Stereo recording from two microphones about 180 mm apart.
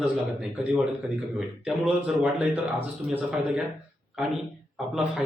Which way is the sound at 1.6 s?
5° right (ahead or behind).